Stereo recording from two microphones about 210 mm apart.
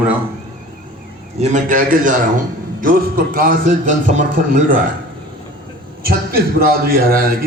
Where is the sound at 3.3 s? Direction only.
40° right (ahead or behind).